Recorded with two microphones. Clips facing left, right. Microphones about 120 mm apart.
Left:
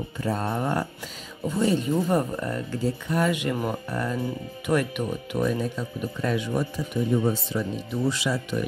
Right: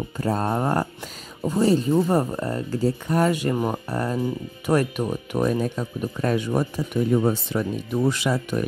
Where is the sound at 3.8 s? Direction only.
40° right (ahead or behind).